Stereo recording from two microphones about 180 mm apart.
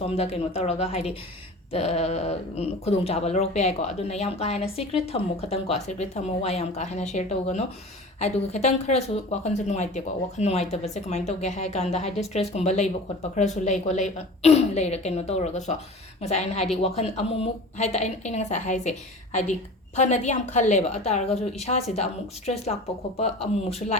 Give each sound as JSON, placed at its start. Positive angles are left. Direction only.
{"t": 0.1, "sound": "a woman's voice", "side_deg": 35}